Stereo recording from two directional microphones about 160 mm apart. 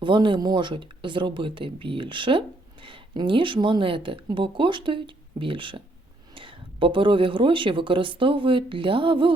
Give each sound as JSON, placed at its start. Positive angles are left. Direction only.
{"t": 0.0, "sound": "speech", "side_deg": -30}